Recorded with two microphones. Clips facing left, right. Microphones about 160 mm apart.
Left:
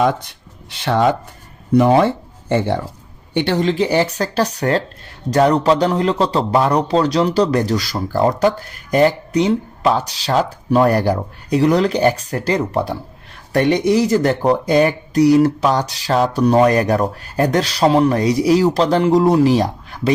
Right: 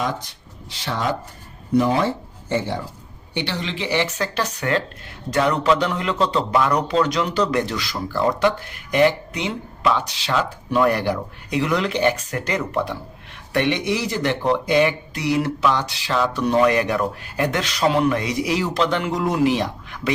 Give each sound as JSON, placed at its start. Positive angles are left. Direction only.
{"t": 0.0, "sound": "speech", "side_deg": 60}
{"t": 3.3, "sound": "a man's voice", "side_deg": 50}